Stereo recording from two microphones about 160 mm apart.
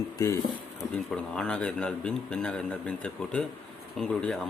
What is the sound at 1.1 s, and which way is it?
Speech, 5° left (ahead or behind).